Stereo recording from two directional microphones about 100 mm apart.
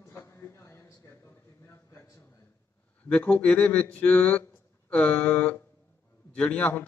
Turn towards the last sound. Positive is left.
turn(degrees=15)  # may be behind; listen again after turning